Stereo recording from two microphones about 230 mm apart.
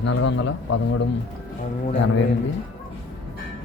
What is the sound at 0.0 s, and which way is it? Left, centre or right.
A man's voice, left.